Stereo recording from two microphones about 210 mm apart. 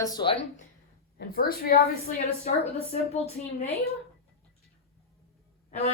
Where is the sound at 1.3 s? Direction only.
45° left (ahead or behind); by 3.7 s 30° left (ahead or behind).